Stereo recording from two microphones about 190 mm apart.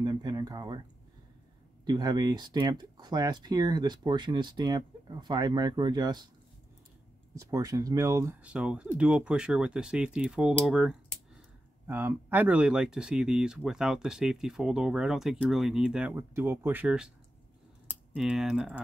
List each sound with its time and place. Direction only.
0.0 s speech: 20° right (ahead or behind)
1.9 s speech: 20° right (ahead or behind)
7.3 s speech: 15° right (ahead or behind)
18.1 s speech: 5° right (ahead or behind)